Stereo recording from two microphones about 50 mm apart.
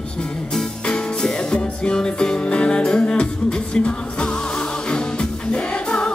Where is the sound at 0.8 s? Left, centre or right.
Centre.